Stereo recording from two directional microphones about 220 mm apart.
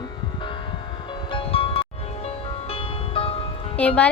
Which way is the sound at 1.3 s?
25° left (ahead or behind).